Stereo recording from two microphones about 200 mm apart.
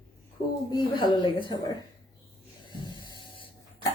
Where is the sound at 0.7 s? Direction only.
25° left (ahead or behind).